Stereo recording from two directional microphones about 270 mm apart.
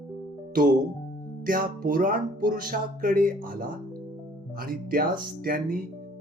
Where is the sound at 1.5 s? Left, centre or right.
Right.